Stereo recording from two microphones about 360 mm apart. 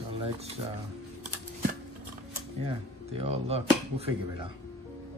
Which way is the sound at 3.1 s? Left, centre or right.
Centre.